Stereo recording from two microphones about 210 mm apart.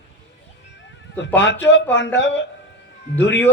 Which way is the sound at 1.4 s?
60° left (ahead or behind).